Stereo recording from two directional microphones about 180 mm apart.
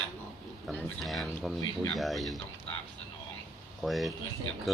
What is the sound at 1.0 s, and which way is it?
Speech, centre (ahead or behind).